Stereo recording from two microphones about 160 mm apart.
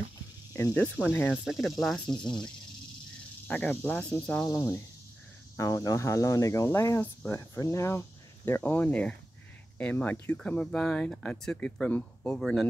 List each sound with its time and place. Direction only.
0.5 s speech: 15° left (ahead or behind)
1.3 s speech: centre (ahead or behind)
4.5 s speech: 20° left (ahead or behind); by 12.6 s 5° left (ahead or behind)